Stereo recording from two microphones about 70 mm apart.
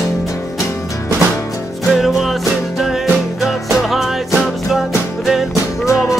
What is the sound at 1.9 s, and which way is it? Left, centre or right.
Music, centre.